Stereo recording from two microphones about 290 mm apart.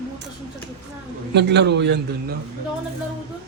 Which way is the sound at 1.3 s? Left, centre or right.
Right.